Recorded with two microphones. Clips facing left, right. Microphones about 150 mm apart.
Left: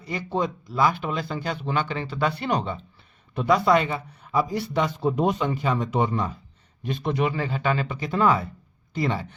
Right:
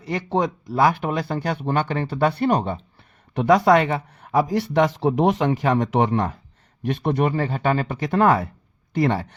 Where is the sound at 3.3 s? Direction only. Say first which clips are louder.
Right 4 dB; 80° right; by 7.9 s 45° right (ahead or behind).